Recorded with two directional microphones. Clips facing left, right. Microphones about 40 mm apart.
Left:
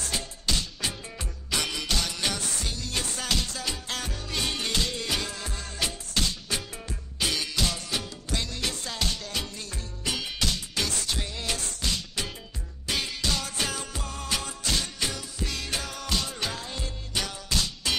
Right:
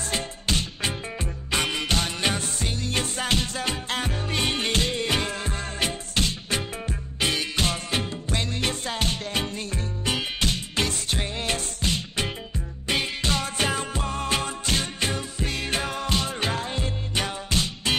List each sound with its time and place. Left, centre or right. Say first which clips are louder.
0.0 s music: right 3 dB; right